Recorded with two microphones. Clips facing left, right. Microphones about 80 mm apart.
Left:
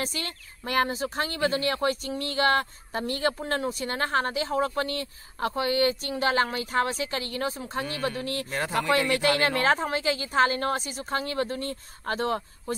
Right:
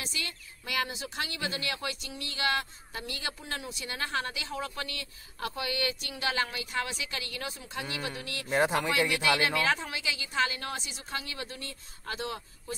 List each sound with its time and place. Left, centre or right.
0.0 s speech: left
8.5 s speech: centre
9.5 s a woman's voice: left